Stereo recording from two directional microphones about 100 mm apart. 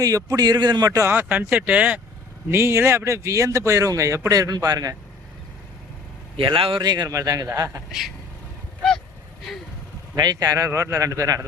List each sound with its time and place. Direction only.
0.0 s speech: 35° right (ahead or behind)
1.1 s speech: 15° right (ahead or behind)
2.5 s speech: 25° right (ahead or behind)
6.3 s a man's voice: 60° right (ahead or behind)
6.8 s speech: 45° right (ahead or behind)
7.1 s speech: 35° right (ahead or behind)
10.2 s speech: 40° right (ahead or behind)